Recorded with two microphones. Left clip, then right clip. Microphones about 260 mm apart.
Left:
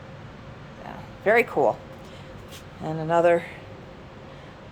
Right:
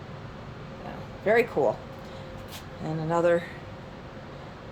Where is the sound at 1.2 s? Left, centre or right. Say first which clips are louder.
Left 3 dB; centre.